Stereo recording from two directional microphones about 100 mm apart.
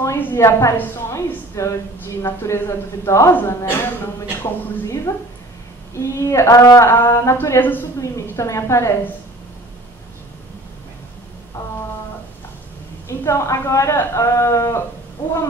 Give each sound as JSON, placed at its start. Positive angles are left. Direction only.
{"t": 0.0, "sound": "a woman's voice", "side_deg": 25}
{"t": 13.2, "sound": "a woman's voice", "side_deg": 30}